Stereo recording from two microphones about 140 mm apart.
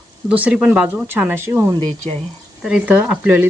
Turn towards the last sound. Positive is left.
turn(degrees=-15)  # may be behind; listen again after turning